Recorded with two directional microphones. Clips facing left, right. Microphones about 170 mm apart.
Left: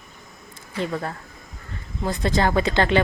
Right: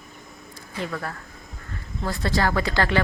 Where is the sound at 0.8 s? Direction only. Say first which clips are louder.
Left 4 dB; 25° left (ahead or behind).